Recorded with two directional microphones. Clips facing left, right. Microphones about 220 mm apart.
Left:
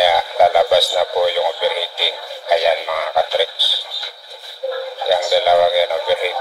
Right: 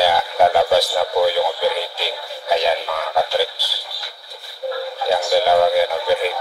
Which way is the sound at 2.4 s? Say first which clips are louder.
Left 3 dB; 10° left (ahead or behind).